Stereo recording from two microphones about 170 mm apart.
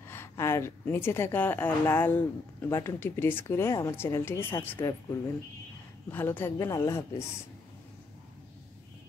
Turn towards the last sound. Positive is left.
turn(degrees=15)  # may be behind; listen again after turning